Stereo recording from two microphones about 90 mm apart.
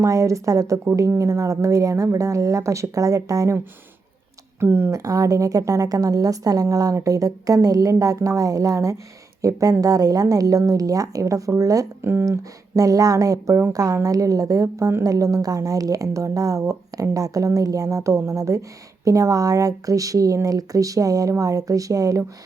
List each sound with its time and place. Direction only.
0.0 s a woman's voice: 35° right (ahead or behind)
4.6 s speech: 20° right (ahead or behind)
4.9 s a woman's voice: 40° right (ahead or behind)
12.0 s speech: 25° right (ahead or behind)
12.4 s a woman's voice: 40° right (ahead or behind)